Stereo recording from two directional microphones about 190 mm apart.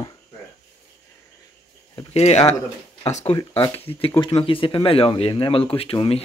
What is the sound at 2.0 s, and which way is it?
Speech, 35° left (ahead or behind).